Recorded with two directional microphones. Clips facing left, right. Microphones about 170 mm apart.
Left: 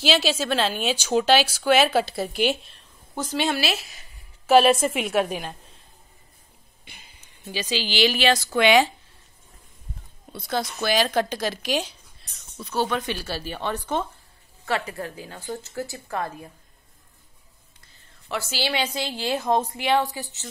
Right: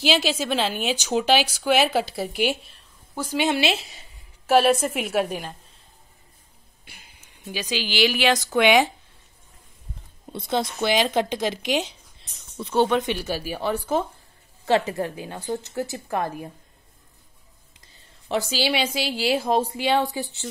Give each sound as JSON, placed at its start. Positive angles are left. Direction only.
{"t": 0.0, "sound": "a woman's voice", "side_deg": -15}
{"t": 4.7, "sound": "a woman's voice", "side_deg": -5}
{"t": 6.8, "sound": "a woman's voice", "side_deg": -5}
{"t": 10.3, "sound": "speech", "side_deg": -25}
{"t": 14.7, "sound": "speech", "side_deg": -20}
{"t": 18.3, "sound": "a woman's voice", "side_deg": -15}